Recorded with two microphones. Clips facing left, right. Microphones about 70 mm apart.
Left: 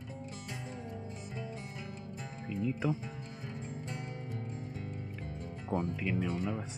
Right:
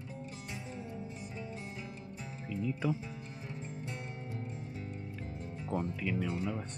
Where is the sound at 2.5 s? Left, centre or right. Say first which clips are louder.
Left 1 dB; centre.